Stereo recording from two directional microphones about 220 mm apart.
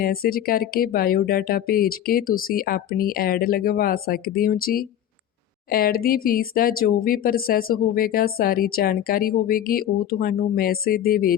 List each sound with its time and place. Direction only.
0.0 s speech: 40° left (ahead or behind)